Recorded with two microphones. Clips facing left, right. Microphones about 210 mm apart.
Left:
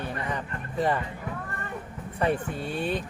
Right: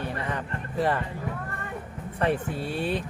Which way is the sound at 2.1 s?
Centre (ahead or behind).